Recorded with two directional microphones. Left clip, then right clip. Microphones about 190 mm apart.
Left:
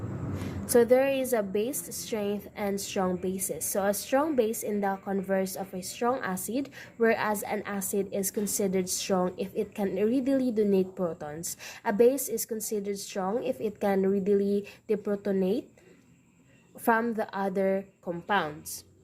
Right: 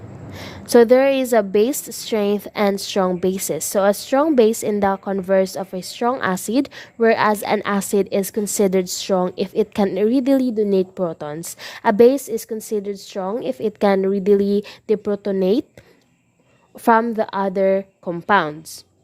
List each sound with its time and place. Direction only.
0.3 s a woman's voice: 45° right (ahead or behind)
16.8 s a woman's voice: 40° right (ahead or behind)